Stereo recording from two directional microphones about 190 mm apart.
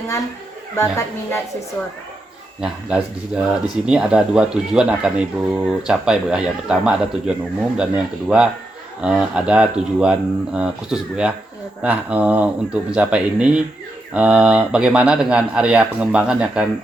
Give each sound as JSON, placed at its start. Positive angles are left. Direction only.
{"t": 0.8, "sound": "speech", "side_deg": 15}
{"t": 3.3, "sound": "speech", "side_deg": -5}